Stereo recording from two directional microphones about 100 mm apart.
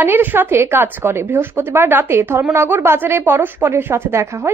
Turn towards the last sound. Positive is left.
turn(degrees=-25)  # may be behind; listen again after turning